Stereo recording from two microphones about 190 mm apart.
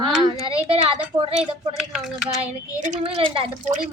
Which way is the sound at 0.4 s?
30° right (ahead or behind).